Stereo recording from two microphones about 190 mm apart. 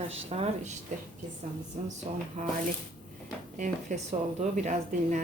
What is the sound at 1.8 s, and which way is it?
Speech, 40° right (ahead or behind).